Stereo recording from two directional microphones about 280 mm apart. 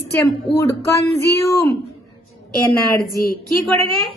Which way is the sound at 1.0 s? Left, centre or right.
Left.